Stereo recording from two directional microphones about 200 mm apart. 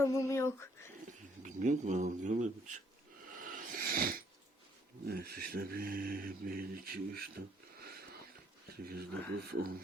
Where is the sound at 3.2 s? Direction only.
45° right (ahead or behind).